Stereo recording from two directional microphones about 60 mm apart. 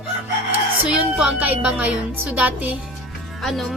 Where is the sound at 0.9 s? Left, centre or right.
Centre.